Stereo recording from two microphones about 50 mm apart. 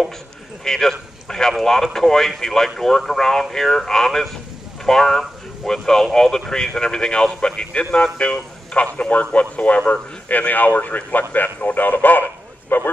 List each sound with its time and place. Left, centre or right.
0.7 s a man's voice: centre; by 12.9 s left